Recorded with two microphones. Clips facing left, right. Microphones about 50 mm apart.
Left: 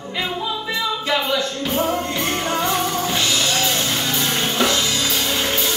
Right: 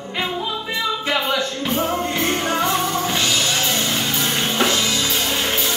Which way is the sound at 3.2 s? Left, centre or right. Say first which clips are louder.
Even; right.